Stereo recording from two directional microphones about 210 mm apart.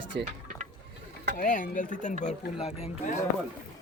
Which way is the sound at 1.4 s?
40° left (ahead or behind).